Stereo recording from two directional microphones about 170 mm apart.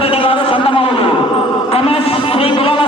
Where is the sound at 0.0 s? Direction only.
35° left (ahead or behind).